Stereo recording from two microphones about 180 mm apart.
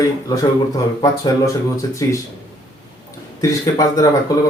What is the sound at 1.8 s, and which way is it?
Speech, 20° left (ahead or behind).